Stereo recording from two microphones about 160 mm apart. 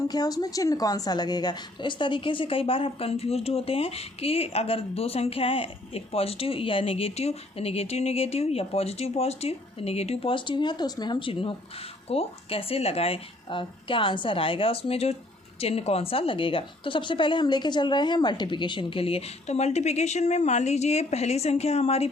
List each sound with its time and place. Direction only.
0.1 s a woman's voice: 25° left (ahead or behind)